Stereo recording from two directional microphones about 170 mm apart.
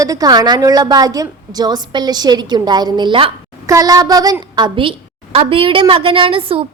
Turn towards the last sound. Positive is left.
turn(degrees=-30)  # may be behind; listen again after turning